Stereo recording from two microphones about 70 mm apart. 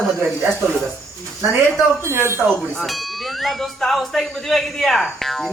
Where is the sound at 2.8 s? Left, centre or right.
Centre.